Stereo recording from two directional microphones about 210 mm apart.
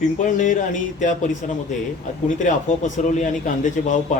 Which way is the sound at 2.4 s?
35° left (ahead or behind).